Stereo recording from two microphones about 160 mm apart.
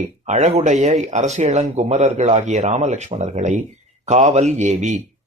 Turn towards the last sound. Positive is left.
turn(degrees=-45)  # may be behind; listen again after turning